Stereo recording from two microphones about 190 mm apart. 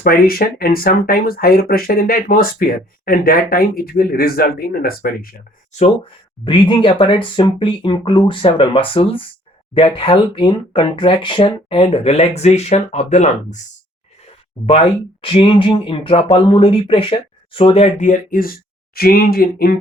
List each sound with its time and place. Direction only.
0.0 s speech: 50° left (ahead or behind)
6.4 s speech: 25° left (ahead or behind)
15.2 s speech: 30° left (ahead or behind); by 19.7 s 55° left (ahead or behind)